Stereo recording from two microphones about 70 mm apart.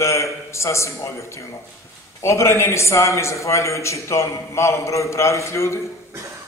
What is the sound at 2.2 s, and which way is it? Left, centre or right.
A man's voice, left.